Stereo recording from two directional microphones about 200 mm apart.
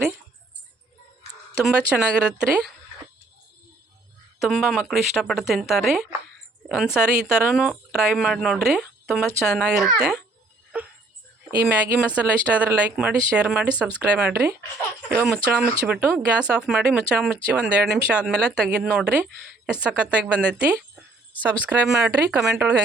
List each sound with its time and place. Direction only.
1.6 s speech: 5° right (ahead or behind)
4.4 s speech: centre (ahead or behind)
11.5 s speech: 10° right (ahead or behind)